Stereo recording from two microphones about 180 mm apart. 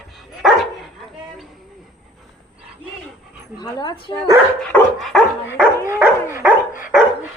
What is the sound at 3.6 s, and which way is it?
Speech, 20° left (ahead or behind).